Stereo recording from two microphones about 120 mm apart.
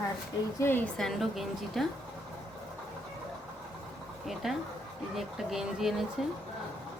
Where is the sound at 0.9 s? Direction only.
Centre (ahead or behind).